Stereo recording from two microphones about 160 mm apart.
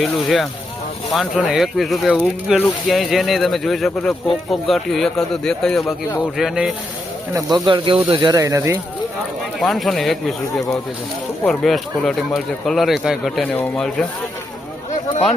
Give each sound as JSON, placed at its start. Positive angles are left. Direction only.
{"t": 0.0, "sound": "speech", "side_deg": 0}
{"t": 5.8, "sound": "speech", "side_deg": 20}
{"t": 6.3, "sound": "speech", "side_deg": -5}
{"t": 7.3, "sound": "speech", "side_deg": -25}
{"t": 9.6, "sound": "speech", "side_deg": 0}